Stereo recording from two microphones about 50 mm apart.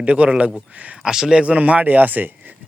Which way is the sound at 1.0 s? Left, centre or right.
Centre.